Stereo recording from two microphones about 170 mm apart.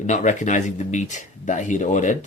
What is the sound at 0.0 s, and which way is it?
Speech, 45° left (ahead or behind).